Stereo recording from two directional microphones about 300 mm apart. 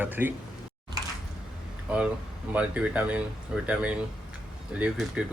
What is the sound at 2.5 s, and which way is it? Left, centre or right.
Speech, centre.